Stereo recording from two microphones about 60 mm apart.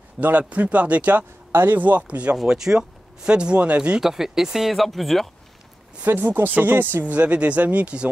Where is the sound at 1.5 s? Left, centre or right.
Right.